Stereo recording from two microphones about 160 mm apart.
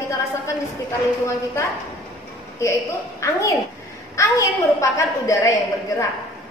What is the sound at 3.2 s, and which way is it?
A woman's voice, 20° left (ahead or behind).